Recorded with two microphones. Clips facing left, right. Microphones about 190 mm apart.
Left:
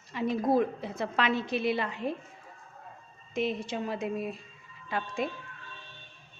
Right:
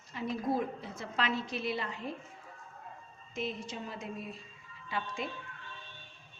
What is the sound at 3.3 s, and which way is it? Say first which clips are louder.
A woman's voice: left 7 dB; 70° left (ahead or behind).